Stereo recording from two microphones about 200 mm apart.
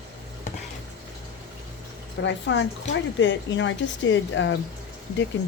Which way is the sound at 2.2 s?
65° left (ahead or behind).